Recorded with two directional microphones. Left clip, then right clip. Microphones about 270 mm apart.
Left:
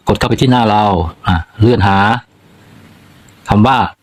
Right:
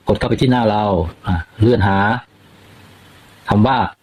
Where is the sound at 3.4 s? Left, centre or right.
Centre.